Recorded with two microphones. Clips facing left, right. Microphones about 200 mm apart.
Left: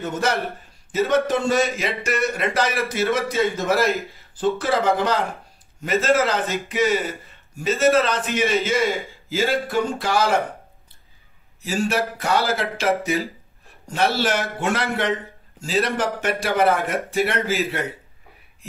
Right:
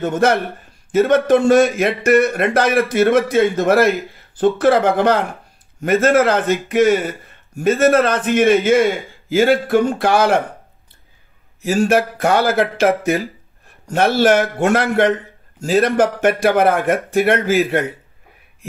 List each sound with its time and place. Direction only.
0.0 s speech: 55° right (ahead or behind)
11.6 s speech: 55° right (ahead or behind)